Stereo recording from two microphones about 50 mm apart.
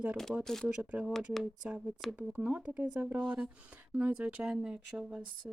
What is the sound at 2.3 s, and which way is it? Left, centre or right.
Speech, right.